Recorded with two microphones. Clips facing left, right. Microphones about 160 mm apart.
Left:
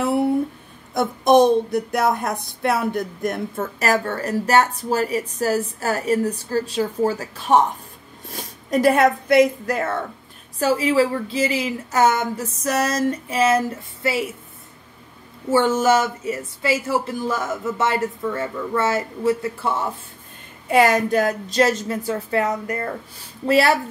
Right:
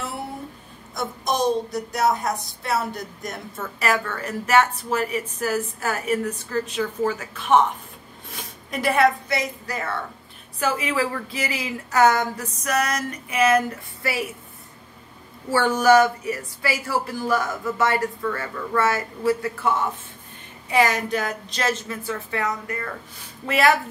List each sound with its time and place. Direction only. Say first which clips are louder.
0.9 s a woman's voice: left 10 dB; 55° left (ahead or behind)
10.6 s speech: left 6 dB; 30° left (ahead or behind)
15.5 s speech: even; 25° left (ahead or behind)
20.7 s a woman's voice: left 5 dB; 50° left (ahead or behind); by 23.8 s 35° left (ahead or behind)